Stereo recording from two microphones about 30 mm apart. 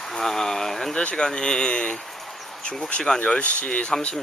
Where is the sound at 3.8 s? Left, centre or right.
Left.